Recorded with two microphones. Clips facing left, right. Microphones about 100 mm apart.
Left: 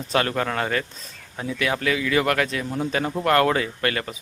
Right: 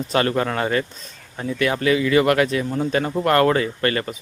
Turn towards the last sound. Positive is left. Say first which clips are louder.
# right 4 dB
turn(degrees=0)  # may be behind; listen again after turning